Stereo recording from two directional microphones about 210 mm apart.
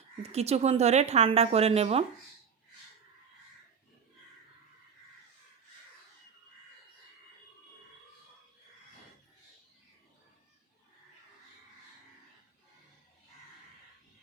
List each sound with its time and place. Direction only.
0.2 s a woman's voice: 30° right (ahead or behind)